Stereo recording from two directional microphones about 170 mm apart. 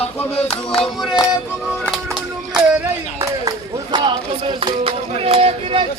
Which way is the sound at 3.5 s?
25° right (ahead or behind).